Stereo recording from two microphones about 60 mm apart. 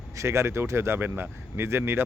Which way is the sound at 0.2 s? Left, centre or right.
Right.